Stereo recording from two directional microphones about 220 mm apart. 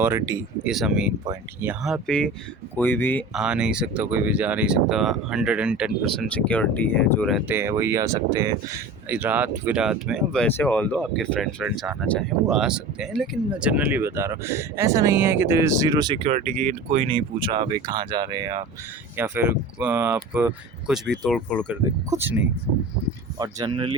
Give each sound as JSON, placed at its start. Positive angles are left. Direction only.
{"t": 0.0, "sound": "speech", "side_deg": -10}
{"t": 0.7, "sound": "speech", "side_deg": 0}
{"t": 3.3, "sound": "speech", "side_deg": -5}
{"t": 6.3, "sound": "speech", "side_deg": 5}
{"t": 21.7, "sound": "speech", "side_deg": -10}
{"t": 23.4, "sound": "speech", "side_deg": -20}